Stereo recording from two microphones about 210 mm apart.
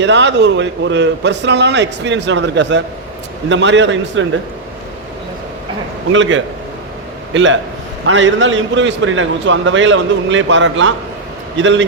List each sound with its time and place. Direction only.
0.0 s a man's voice: 55° right (ahead or behind)
6.1 s a man's voice: 65° right (ahead or behind)